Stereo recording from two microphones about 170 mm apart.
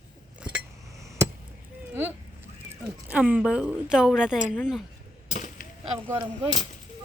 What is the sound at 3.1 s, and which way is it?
A woman's voice, 10° right (ahead or behind).